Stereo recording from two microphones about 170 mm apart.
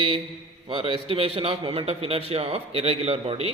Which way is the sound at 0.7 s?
30° right (ahead or behind).